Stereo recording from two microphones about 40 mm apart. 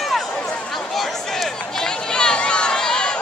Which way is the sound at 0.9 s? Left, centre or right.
Centre.